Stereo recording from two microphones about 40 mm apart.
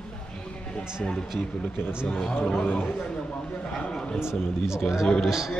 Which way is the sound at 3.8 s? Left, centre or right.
Centre.